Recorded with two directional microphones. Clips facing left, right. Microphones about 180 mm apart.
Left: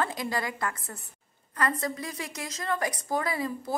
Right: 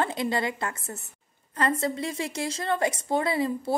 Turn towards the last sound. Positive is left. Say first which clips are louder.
# right 5 dB
turn(degrees=-30)  # may be behind; listen again after turning